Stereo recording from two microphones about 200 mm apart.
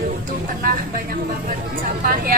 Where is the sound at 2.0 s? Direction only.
45° right (ahead or behind).